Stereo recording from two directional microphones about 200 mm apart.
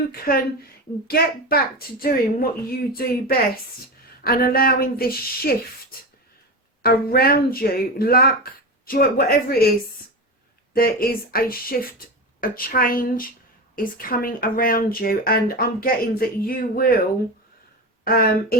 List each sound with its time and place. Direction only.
0.3 s speech: 50° left (ahead or behind)
6.8 s speech: 50° left (ahead or behind)
10.8 s speech: 45° left (ahead or behind)
18.0 s speech: 50° left (ahead or behind)